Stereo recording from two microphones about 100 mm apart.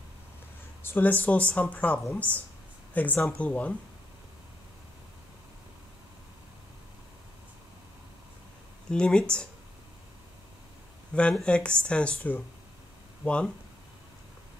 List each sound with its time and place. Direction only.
0.8 s speech: 20° left (ahead or behind)
8.9 s speech: 10° left (ahead or behind)
11.1 s speech: 10° left (ahead or behind)